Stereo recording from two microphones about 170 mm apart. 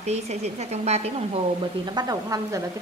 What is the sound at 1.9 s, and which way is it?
Speech, 20° right (ahead or behind).